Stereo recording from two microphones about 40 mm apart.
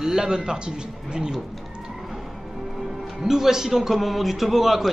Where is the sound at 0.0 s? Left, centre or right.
Centre.